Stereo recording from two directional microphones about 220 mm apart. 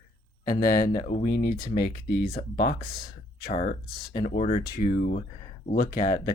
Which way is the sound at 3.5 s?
25° left (ahead or behind).